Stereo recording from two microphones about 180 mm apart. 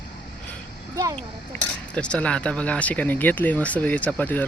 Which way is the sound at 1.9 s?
5° left (ahead or behind).